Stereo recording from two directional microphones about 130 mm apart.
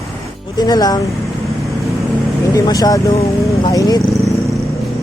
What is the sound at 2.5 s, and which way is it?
Speech, 30° left (ahead or behind).